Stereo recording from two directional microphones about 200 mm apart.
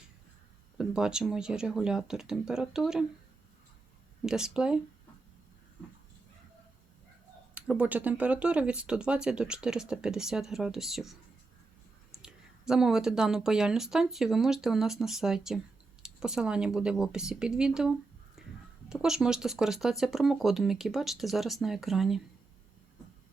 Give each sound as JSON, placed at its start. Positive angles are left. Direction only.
{"t": 0.8, "sound": "speech", "side_deg": -5}
{"t": 4.3, "sound": "speech", "side_deg": -5}
{"t": 7.5, "sound": "speech", "side_deg": -5}
{"t": 12.2, "sound": "speech", "side_deg": 0}
{"t": 18.4, "sound": "a sound", "side_deg": 0}
{"t": 18.9, "sound": "speech", "side_deg": -5}